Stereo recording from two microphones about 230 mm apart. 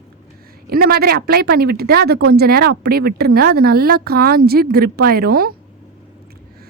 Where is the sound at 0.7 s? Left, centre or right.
Right.